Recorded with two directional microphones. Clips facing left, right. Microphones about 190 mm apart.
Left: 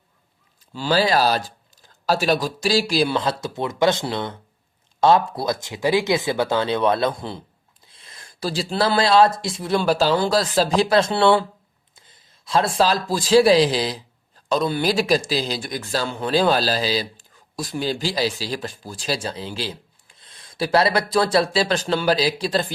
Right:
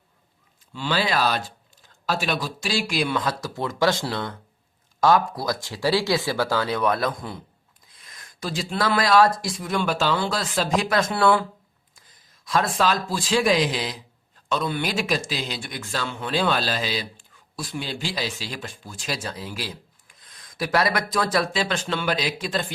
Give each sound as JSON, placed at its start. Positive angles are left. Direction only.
{"t": 0.7, "sound": "a man's voice", "side_deg": 35}